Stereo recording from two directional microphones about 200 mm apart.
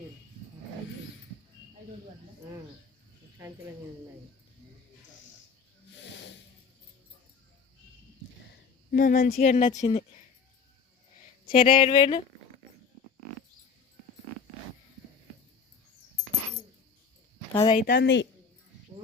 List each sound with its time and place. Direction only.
6.1 s snake: 65° left (ahead or behind)
8.9 s speech: 45° left (ahead or behind)
11.7 s speech: 25° left (ahead or behind)
17.5 s speech: 25° left (ahead or behind)
17.8 s speech: 55° left (ahead or behind)